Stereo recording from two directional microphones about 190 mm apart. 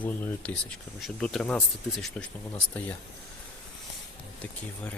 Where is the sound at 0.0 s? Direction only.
10° left (ahead or behind).